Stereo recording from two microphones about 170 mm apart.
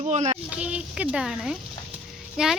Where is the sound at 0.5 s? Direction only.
5° right (ahead or behind).